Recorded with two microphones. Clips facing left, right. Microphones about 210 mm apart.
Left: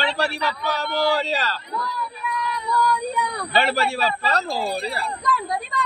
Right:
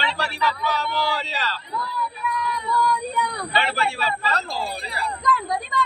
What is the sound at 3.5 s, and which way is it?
Speech, 40° left (ahead or behind).